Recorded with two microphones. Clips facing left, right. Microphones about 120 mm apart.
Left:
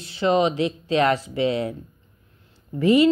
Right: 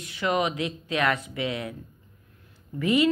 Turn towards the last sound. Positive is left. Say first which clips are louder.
# left 6 dB
turn(degrees=30)  # may be behind; listen again after turning